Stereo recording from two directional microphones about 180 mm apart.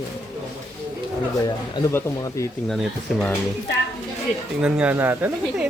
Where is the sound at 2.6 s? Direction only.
Centre (ahead or behind).